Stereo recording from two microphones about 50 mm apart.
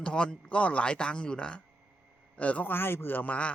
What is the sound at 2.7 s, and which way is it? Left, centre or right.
Speech, left.